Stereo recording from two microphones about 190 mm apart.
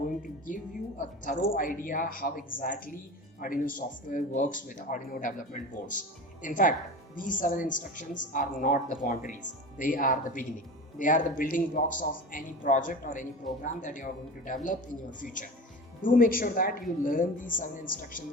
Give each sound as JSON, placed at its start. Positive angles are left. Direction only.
{"t": 0.2, "sound": "a woman's voice", "side_deg": 45}
{"t": 16.0, "sound": "a woman's voice", "side_deg": 50}